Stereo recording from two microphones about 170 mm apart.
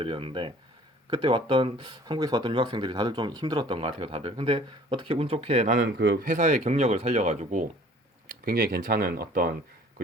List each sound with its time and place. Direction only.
0.0 s speech: 30° right (ahead or behind)
5.8 s speech: 90° right
6.2 s speech: 45° right (ahead or behind)
8.4 s speech: 60° right (ahead or behind)